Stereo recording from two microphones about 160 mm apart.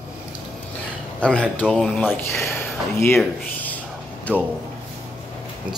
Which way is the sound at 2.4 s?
15° left (ahead or behind).